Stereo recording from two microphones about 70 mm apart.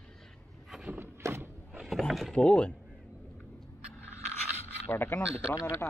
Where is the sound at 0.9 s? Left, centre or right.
Right.